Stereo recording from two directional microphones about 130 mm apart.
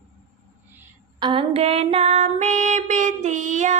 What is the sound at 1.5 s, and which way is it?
Child singing, 50° right (ahead or behind).